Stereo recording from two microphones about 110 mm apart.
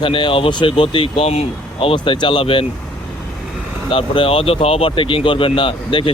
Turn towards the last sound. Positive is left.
turn(degrees=50)  # may be behind; listen again after turning